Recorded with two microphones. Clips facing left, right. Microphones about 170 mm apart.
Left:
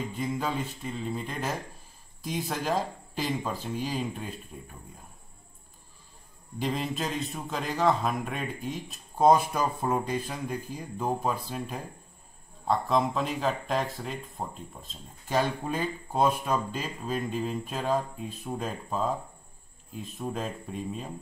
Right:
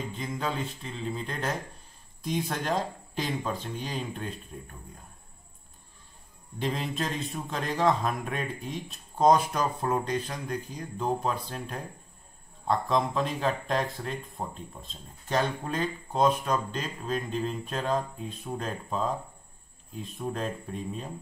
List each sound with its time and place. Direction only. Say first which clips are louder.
0.2 s speech: left 2 dB; 5° left (ahead or behind)
6.6 s speech: even; centre (ahead or behind)